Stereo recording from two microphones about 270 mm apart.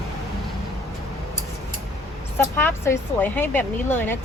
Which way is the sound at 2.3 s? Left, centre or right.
Centre.